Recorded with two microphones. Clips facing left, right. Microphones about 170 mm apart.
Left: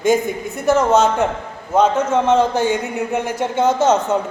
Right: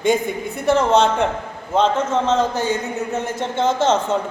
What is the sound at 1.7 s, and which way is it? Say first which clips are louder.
A woman's voice: left 3 dB; 10° left (ahead or behind).